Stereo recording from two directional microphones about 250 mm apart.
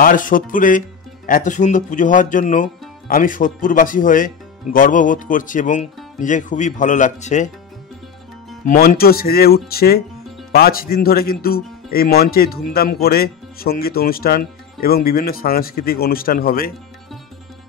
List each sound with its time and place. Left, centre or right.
0.0 s speech: left
8.6 s speech: left